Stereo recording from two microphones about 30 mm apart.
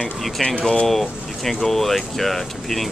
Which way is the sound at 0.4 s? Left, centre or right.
Centre.